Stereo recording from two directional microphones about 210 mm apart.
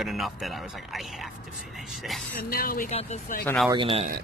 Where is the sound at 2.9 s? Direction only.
30° left (ahead or behind).